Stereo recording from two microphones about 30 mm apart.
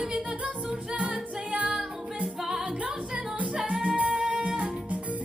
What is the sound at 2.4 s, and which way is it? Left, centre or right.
Music, centre.